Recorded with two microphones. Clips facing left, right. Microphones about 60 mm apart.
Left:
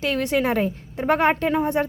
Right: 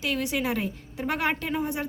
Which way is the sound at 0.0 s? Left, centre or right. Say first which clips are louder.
Left 6 dB; left.